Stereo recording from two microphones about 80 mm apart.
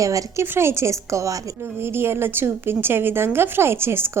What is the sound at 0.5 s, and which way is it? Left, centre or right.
Speech, right.